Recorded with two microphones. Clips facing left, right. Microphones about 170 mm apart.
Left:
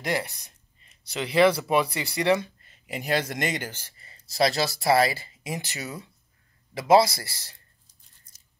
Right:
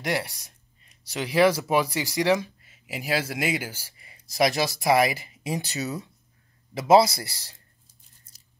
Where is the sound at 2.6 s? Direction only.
5° right (ahead or behind).